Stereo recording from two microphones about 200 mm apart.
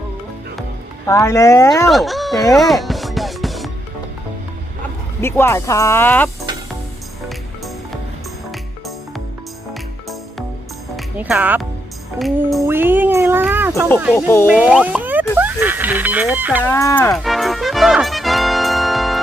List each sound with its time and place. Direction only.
1.0 s speech: 15° left (ahead or behind)
1.9 s music: centre (ahead or behind)
5.2 s speech: 10° left (ahead or behind)
10.9 s speech: 5° right (ahead or behind)
12.6 s speech: 10° right (ahead or behind)
14.5 s music: 5° right (ahead or behind)
15.4 s speech: 10° right (ahead or behind)
16.6 s speech: 15° left (ahead or behind)
17.2 s music: centre (ahead or behind)